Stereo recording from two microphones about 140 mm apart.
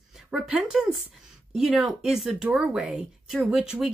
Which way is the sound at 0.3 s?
5° right (ahead or behind).